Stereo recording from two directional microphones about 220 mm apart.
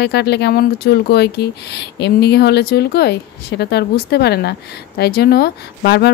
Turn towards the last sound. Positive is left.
turn(degrees=50)  # may be behind; listen again after turning